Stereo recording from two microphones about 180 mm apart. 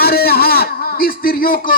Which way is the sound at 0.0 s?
60° left (ahead or behind).